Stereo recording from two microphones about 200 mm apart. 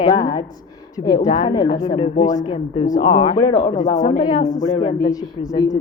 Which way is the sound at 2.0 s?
30° left (ahead or behind).